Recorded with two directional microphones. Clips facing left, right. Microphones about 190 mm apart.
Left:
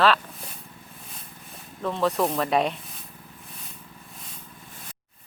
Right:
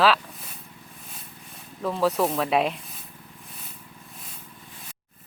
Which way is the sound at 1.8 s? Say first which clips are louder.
Right 1 dB; 5° right (ahead or behind).